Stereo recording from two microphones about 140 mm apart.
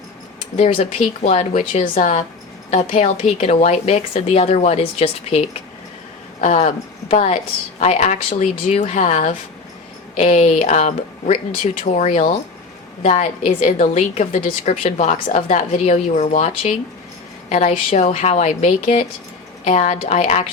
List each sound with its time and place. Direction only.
0.5 s a woman's voice: 50° left (ahead or behind)
6.4 s a woman's voice: 55° left (ahead or behind)